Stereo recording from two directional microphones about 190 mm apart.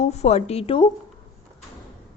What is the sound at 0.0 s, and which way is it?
Speech, 35° left (ahead or behind).